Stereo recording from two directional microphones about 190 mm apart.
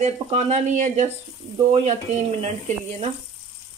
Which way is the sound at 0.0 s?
35° right (ahead or behind).